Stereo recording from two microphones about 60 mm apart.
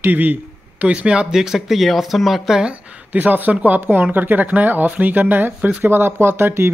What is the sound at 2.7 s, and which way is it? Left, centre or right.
Speech, right.